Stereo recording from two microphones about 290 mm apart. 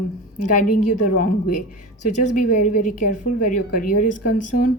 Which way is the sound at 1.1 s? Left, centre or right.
Left.